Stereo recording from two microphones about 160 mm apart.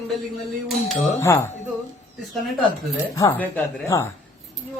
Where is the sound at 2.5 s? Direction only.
Centre (ahead or behind).